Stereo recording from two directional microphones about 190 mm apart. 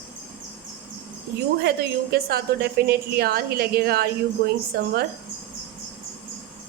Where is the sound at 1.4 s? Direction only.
55° right (ahead or behind).